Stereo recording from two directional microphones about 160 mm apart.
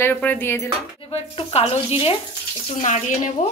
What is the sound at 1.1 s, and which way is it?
Speech, 40° left (ahead or behind).